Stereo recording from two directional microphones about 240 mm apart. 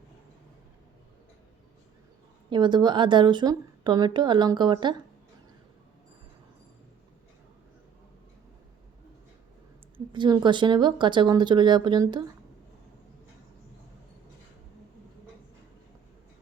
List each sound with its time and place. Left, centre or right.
2.5 s a woman's voice: centre
10.1 s a woman's voice: centre